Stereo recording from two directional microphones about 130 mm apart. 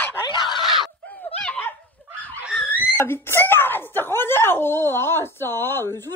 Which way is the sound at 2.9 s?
15° left (ahead or behind).